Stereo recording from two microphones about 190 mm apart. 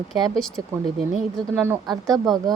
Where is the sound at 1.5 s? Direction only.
10° right (ahead or behind).